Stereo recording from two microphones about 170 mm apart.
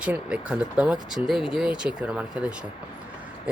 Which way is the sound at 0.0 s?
5° right (ahead or behind).